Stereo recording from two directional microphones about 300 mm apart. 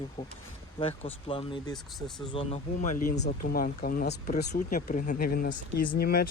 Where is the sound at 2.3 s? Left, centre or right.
Centre.